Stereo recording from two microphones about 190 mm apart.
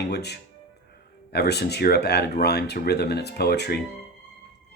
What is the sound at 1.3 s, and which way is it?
Speech, 60° left (ahead or behind).